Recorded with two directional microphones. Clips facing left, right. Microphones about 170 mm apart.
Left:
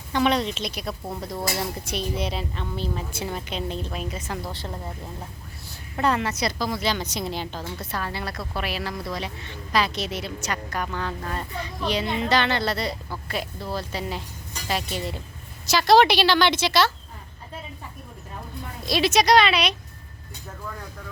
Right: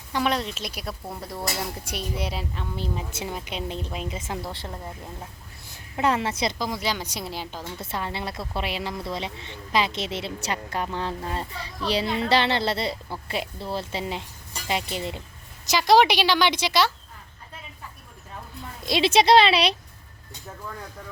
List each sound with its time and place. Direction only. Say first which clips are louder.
0.1 s a woman's voice: left 3 dB; 5° right (ahead or behind)
1.4 s a woman's voice: left 2 dB; 5° left (ahead or behind)
1.8 s a woman's voice: left 3 dB; 10° right (ahead or behind)
6.0 s a woman's voice: even; 25° right (ahead or behind); by 7.6 s 5° right (ahead or behind)
7.8 s a woman's voice: right 2 dB; 25° right (ahead or behind)
18.9 s a woman's voice: right 1 dB; 25° right (ahead or behind)